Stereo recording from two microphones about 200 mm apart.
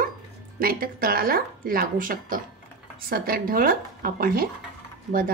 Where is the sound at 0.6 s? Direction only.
45° right (ahead or behind).